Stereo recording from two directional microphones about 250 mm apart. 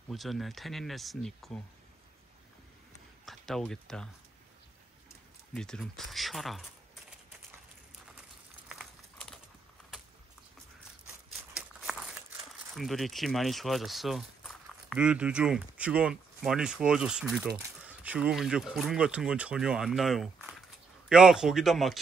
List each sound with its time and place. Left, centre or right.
0.1 s speech: centre
3.3 s speech: centre
5.5 s speech: centre
8.6 s crumpling: centre
11.5 s crumpling: centre
12.7 s speech: centre